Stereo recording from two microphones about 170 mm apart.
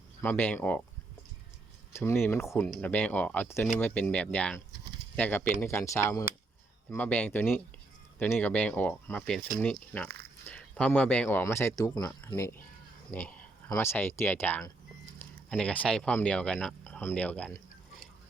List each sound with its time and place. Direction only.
0.2 s speech: 10° left (ahead or behind)
1.9 s speech: 15° left (ahead or behind)